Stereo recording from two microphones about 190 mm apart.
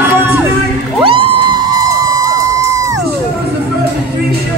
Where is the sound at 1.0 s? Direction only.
25° right (ahead or behind).